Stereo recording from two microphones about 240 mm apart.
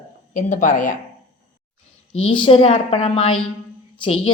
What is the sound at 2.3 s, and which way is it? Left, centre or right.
A woman's voice, left.